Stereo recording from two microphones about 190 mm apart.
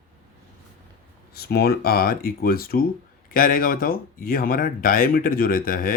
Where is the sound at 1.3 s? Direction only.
55° left (ahead or behind).